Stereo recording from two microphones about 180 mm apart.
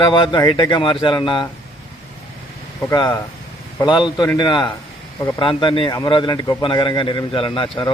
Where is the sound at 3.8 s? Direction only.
25° left (ahead or behind).